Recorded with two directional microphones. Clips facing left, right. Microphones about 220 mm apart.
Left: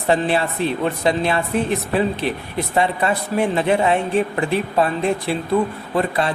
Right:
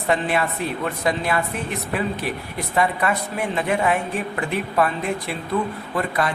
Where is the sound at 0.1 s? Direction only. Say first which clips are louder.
Left 3 dB; 30° left (ahead or behind).